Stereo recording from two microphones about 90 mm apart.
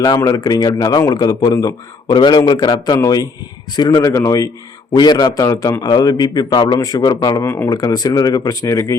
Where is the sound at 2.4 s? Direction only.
50° left (ahead or behind).